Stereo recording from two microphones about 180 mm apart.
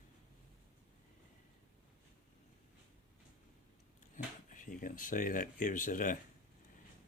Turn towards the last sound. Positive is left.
turn(degrees=50)  # may be behind; listen again after turning